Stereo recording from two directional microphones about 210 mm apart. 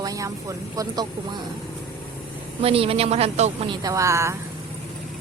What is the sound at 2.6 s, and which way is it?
A woman's voice, 25° right (ahead or behind).